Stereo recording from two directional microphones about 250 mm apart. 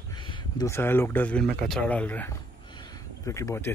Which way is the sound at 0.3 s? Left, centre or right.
Centre.